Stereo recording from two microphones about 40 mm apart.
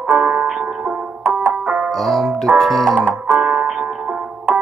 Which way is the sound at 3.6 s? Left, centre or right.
Centre.